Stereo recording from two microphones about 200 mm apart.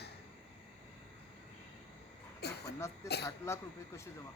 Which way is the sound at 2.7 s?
15° left (ahead or behind).